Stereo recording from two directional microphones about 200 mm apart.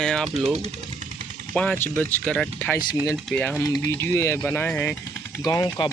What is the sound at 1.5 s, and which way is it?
Speech, 5° left (ahead or behind).